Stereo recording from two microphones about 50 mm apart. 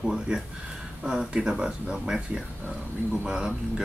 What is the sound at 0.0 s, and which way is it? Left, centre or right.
Speech, centre.